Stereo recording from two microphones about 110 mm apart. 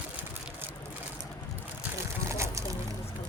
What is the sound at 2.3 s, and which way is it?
Boat, 30° right (ahead or behind).